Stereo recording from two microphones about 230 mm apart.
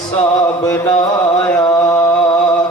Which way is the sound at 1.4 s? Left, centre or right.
Centre.